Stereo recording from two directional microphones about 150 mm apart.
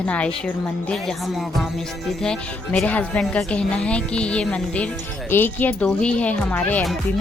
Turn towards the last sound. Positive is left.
turn(degrees=10)  # may be behind; listen again after turning